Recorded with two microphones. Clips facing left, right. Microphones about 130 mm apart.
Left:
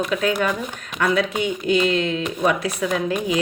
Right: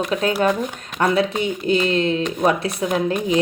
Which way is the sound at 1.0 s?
35° right (ahead or behind).